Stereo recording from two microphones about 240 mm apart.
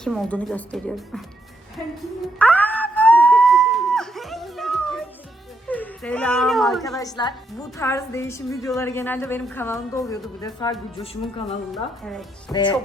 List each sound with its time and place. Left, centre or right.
0.0 s a woman's voice: centre
2.4 s a sound: centre
5.6 s speech: centre
7.0 s a woman's voice: centre